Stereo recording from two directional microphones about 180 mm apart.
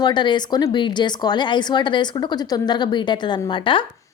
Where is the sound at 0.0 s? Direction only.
25° left (ahead or behind).